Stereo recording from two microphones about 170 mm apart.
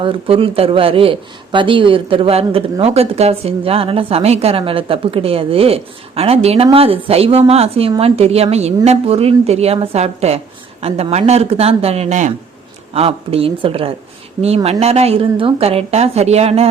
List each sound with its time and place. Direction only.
0.0 s a man's voice: 30° right (ahead or behind)